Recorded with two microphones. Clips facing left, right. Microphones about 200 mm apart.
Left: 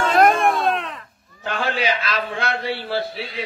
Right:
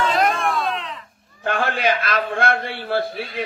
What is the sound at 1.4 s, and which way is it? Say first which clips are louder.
A man's voice: right 2 dB; 55° right (ahead or behind).